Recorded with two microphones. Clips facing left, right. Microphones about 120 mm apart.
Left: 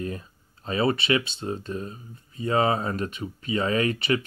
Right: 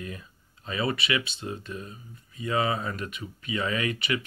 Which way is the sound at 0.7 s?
30° left (ahead or behind).